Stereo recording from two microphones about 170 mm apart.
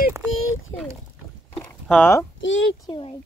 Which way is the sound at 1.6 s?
10° left (ahead or behind).